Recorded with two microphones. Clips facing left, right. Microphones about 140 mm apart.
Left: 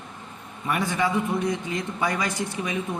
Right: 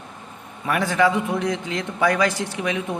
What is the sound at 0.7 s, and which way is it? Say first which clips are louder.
Speech: right 5 dB; 90° right.